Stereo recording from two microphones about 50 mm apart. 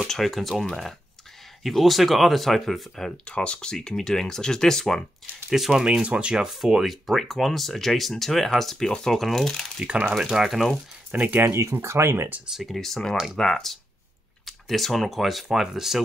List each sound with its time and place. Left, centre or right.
0.1 s speech: centre
3.3 s speech: left
3.7 s speech: centre
5.5 s speech: centre
6.0 s speech: right; by 9.7 s centre
10.2 s speech: centre
11.1 s speech: right
11.4 s speech: right
12.6 s speech: centre